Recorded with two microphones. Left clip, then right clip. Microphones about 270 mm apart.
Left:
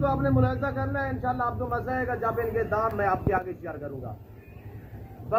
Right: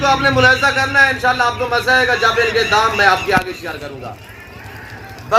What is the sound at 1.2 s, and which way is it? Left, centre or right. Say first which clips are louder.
Speech: right 13 dB; centre.